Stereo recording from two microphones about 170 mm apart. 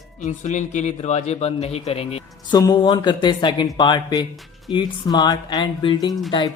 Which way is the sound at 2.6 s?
25° left (ahead or behind).